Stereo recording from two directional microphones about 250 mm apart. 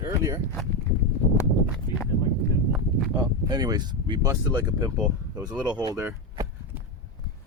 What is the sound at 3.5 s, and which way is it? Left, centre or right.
Speech, centre.